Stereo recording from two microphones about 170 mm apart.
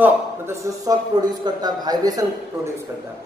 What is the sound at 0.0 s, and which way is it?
A man's voice, 15° right (ahead or behind).